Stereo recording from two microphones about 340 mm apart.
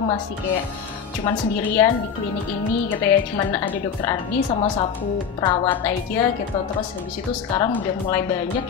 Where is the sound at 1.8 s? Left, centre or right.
Centre.